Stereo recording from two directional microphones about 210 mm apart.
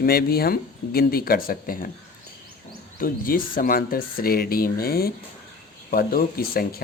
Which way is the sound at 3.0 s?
45° left (ahead or behind).